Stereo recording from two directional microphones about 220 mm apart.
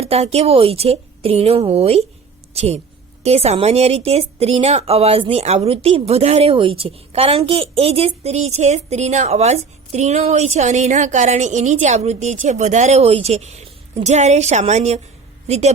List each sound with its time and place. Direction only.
0.0 s a woman's voice: 25° right (ahead or behind)